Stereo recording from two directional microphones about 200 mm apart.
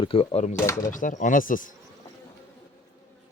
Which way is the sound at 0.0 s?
25° left (ahead or behind).